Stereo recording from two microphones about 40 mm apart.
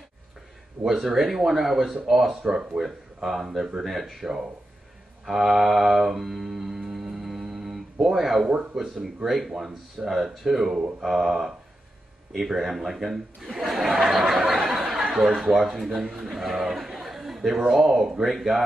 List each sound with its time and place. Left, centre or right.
0.8 s speech: centre
2.4 s speech: centre
5.2 s a sound: centre
9.0 s speech: centre
14.5 s a sound: centre
15.1 s speech: centre
15.9 s speech: centre
16.2 s a man's voice: centre